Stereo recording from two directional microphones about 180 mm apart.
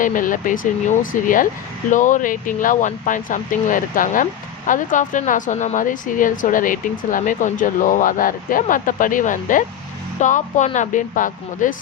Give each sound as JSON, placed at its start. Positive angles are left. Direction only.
{"t": 0.0, "sound": "speech", "side_deg": 45}